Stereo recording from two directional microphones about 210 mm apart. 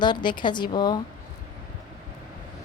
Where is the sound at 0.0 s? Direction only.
20° left (ahead or behind).